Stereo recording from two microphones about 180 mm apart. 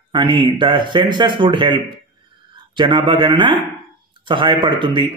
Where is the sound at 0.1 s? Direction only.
25° right (ahead or behind).